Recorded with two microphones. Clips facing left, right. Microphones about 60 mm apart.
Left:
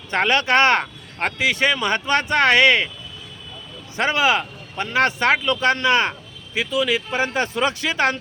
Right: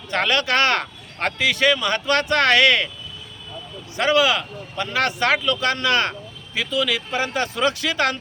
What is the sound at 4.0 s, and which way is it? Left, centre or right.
Speech, left.